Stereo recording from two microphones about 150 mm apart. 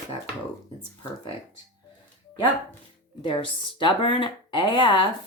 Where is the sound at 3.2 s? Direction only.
35° left (ahead or behind).